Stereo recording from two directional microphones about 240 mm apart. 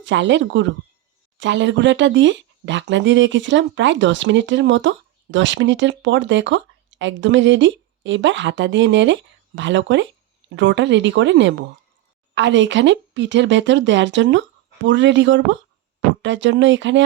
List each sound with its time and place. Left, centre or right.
0.0 s speech: right